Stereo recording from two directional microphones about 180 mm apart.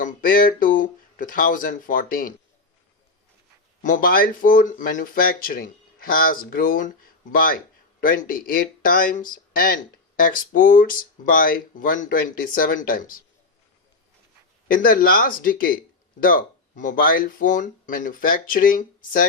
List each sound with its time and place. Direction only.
0.0 s speech: 50° left (ahead or behind)
3.8 s speech: 45° left (ahead or behind)
14.7 s speech: 50° left (ahead or behind)